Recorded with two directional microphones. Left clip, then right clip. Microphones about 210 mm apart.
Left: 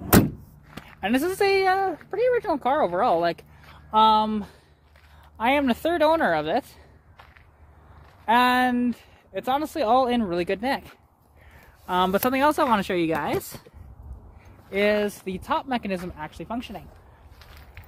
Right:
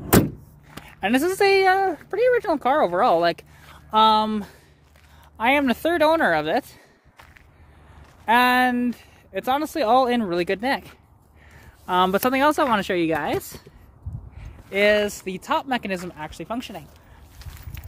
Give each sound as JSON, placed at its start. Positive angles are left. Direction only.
{"t": 0.8, "sound": "speech", "side_deg": -35}
{"t": 5.4, "sound": "speech", "side_deg": -25}
{"t": 8.3, "sound": "speech", "side_deg": -30}
{"t": 14.7, "sound": "speech", "side_deg": -25}